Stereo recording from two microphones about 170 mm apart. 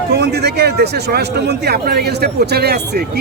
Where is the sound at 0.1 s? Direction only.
75° right (ahead or behind).